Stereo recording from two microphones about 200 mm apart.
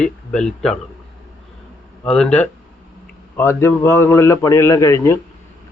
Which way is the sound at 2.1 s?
5° left (ahead or behind).